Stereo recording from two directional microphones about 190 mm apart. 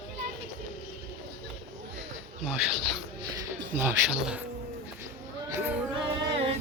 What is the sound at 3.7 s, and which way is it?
Speech, 10° right (ahead or behind).